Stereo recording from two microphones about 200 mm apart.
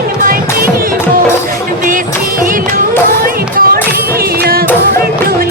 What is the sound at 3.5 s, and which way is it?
Music, 45° right (ahead or behind).